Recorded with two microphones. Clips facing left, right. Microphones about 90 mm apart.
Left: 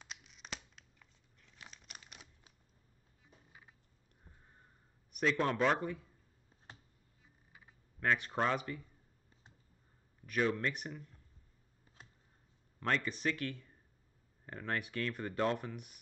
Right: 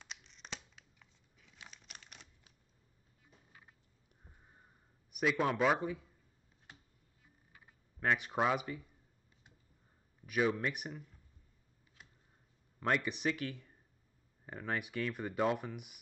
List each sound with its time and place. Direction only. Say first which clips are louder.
0.0 s scissors: even; 5° left (ahead or behind)
5.1 s speech: even; 5° right (ahead or behind)
8.0 s speech: right 1 dB; 10° right (ahead or behind)
10.2 s speech: right 1 dB; 10° right (ahead or behind)
12.0 s a sound: left 1 dB; 30° left (ahead or behind)
12.8 s speech: right 1 dB; 10° right (ahead or behind)